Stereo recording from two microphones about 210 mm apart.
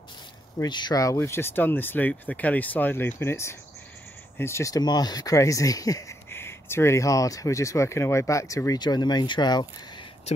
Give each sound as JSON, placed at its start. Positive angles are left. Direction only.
{"t": 0.6, "sound": "speech", "side_deg": 20}